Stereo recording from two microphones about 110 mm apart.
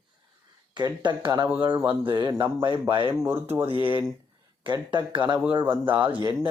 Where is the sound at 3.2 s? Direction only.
20° right (ahead or behind).